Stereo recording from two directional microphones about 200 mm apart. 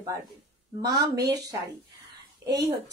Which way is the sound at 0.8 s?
20° right (ahead or behind).